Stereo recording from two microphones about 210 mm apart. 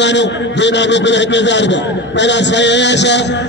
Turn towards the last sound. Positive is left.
turn(degrees=55)  # may be behind; listen again after turning